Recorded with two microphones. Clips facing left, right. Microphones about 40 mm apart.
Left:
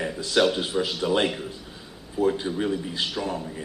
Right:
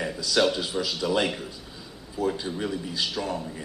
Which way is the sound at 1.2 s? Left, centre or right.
Centre.